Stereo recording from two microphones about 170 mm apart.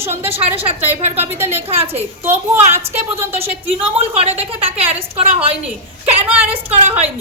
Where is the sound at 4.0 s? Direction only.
35° right (ahead or behind).